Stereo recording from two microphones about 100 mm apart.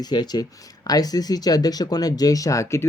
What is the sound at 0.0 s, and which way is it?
Speech, 45° left (ahead or behind).